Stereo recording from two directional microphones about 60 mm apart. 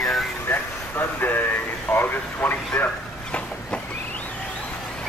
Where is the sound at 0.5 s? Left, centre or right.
Left.